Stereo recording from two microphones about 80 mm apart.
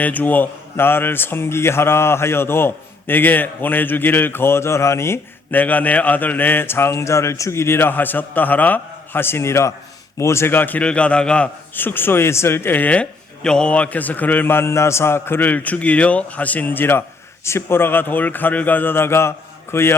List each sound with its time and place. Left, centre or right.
0.0 s a man's voice: left
5.5 s a man's voice: left